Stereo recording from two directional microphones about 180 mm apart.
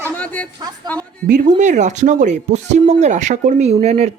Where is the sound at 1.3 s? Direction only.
45° right (ahead or behind).